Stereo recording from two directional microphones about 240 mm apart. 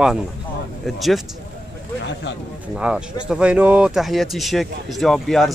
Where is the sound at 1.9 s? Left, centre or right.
Left.